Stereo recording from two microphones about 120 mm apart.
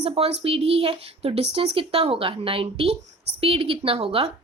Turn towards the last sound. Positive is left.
turn(degrees=-55)  # may be behind; listen again after turning